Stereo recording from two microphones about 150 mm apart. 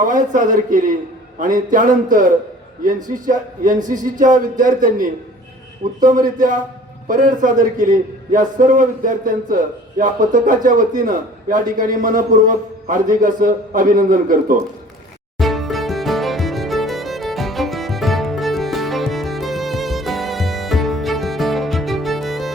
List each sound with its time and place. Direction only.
0.0 s a man's voice: 60° right (ahead or behind)
7.1 s a man's voice: 60° right (ahead or behind)
15.4 s music: centre (ahead or behind)